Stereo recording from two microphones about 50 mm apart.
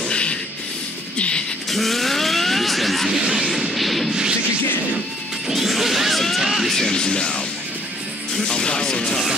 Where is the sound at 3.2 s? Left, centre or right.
Centre.